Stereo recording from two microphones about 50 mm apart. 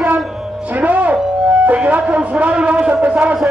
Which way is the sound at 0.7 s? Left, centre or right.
Right.